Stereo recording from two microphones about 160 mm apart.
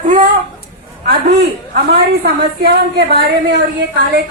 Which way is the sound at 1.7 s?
75° right (ahead or behind).